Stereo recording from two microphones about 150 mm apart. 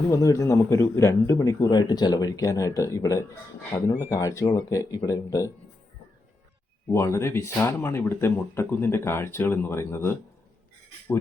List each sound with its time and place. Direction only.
0.1 s speech: 20° left (ahead or behind)
6.9 s speech: 20° left (ahead or behind)